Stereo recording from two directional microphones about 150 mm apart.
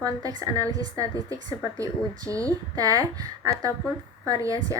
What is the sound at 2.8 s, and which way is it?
A woman's voice, 25° right (ahead or behind).